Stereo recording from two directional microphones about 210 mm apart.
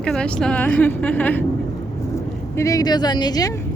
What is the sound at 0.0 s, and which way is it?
Speech, 5° left (ahead or behind).